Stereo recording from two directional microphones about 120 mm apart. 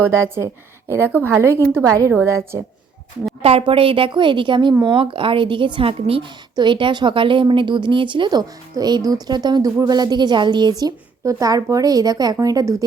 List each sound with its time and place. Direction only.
0.0 s a woman's voice: 20° right (ahead or behind)
3.4 s a woman's voice: 50° right (ahead or behind); by 12.7 s 30° right (ahead or behind)